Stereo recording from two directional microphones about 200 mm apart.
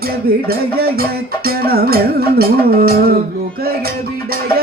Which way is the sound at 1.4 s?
50° right (ahead or behind).